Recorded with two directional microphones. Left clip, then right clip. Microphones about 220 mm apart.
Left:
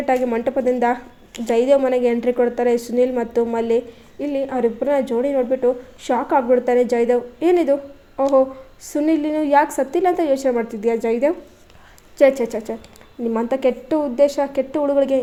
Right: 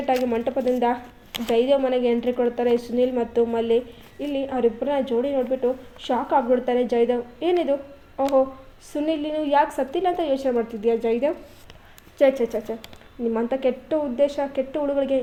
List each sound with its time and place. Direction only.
0.0 s a woman's voice: 30° left (ahead or behind)